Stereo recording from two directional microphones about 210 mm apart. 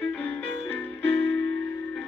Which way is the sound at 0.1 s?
5° left (ahead or behind).